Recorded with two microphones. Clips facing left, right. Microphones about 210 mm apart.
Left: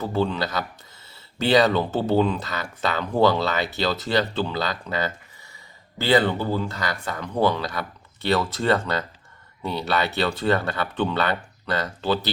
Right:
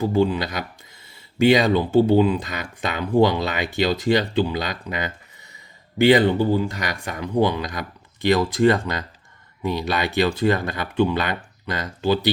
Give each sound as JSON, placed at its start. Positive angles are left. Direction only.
{"t": 0.0, "sound": "speech", "side_deg": -15}